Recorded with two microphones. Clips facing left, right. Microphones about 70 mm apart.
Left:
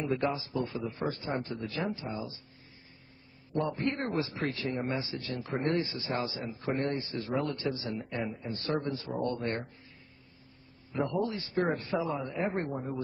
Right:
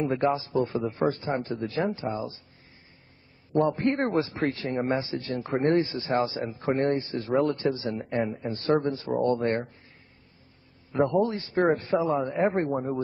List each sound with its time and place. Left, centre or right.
0.0 s a man's voice: right
3.5 s a man's voice: right
6.4 s a man's voice: right
7.9 s a man's voice: right
8.6 s a man's voice: right
10.9 s a man's voice: right
11.5 s a man's voice: right